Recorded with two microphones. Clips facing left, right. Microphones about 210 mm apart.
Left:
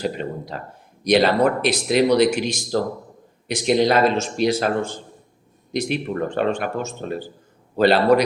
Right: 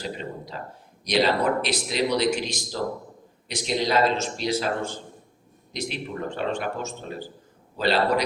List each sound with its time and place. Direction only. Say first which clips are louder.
0.0 s speech: left 7 dB; 60° left (ahead or behind)
5.7 s speech: left 8 dB; 60° left (ahead or behind)